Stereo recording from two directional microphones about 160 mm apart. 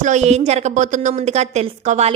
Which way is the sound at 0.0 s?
45° right (ahead or behind).